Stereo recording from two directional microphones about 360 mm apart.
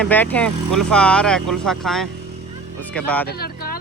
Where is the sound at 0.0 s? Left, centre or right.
Centre.